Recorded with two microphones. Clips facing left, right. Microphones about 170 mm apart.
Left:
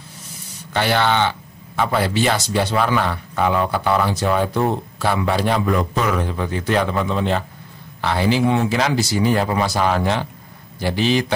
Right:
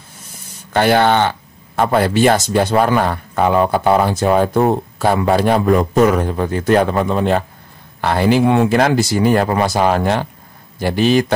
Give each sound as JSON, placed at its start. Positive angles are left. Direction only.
{"t": 0.7, "sound": "speech", "side_deg": -50}